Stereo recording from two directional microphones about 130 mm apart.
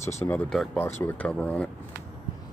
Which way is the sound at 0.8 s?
15° left (ahead or behind).